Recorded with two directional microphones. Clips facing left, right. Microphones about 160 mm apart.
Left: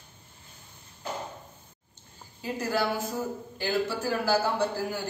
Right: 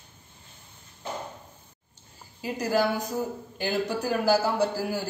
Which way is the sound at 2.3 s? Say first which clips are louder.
Right 3 dB; 10° right (ahead or behind).